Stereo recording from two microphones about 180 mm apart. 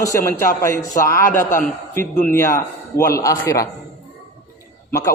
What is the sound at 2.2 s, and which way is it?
A man's voice, 15° left (ahead or behind).